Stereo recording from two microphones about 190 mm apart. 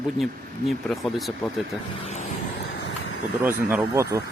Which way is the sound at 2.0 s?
40° left (ahead or behind).